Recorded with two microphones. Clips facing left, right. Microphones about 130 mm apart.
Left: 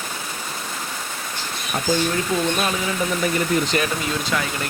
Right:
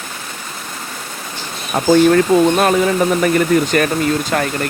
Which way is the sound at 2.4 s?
55° right (ahead or behind).